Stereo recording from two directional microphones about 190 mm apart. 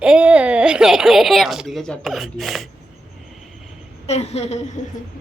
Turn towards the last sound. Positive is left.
turn(degrees=35)  # may be behind; listen again after turning